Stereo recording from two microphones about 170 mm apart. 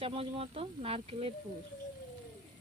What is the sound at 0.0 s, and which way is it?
Speech, 35° right (ahead or behind).